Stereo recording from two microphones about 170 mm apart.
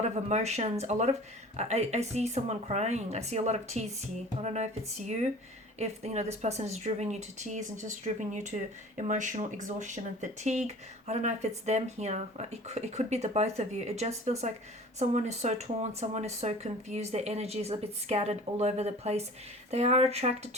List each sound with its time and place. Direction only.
0.3 s speech: 40° right (ahead or behind)